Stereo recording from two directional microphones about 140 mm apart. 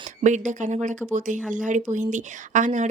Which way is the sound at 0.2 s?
60° right (ahead or behind).